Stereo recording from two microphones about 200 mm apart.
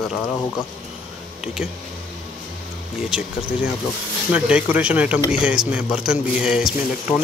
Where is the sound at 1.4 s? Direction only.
5° right (ahead or behind).